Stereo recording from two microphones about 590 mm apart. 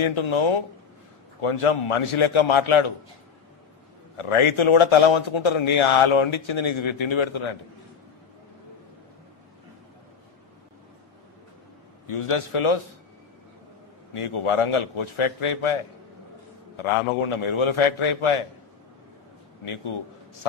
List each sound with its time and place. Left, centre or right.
0.0 s a man's voice: left
4.2 s a man's voice: left
12.1 s a man's voice: left
14.1 s a man's voice: left
19.6 s a man's voice: left